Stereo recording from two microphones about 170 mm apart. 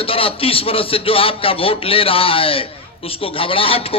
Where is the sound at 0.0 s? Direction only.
35° left (ahead or behind).